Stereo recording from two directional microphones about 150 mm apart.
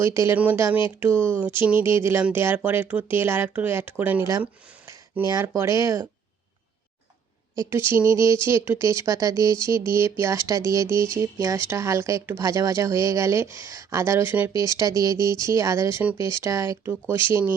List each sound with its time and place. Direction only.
0.0 s speech: 20° right (ahead or behind)
7.7 s speech: 15° right (ahead or behind)